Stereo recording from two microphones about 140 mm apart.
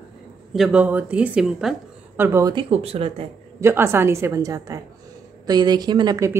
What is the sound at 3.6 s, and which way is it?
A woman's voice, 20° right (ahead or behind).